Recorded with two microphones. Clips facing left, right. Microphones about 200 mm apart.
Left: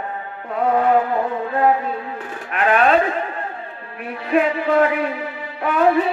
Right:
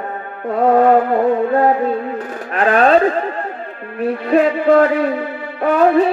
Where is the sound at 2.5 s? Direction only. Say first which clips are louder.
Right 4 dB; 35° right (ahead or behind).